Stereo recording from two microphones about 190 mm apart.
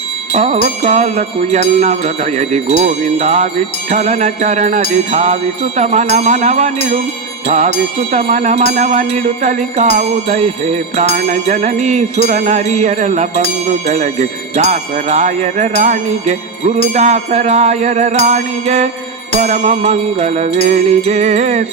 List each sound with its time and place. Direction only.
0.3 s jingle bell: 35° right (ahead or behind)